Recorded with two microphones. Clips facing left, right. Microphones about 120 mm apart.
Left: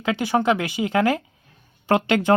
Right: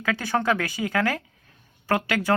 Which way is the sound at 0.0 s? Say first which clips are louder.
Left 4 dB; 20° left (ahead or behind).